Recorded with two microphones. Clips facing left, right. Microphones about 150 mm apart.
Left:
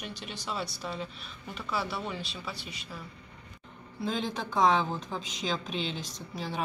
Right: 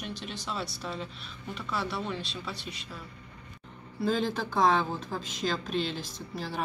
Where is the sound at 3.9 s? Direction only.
Centre (ahead or behind).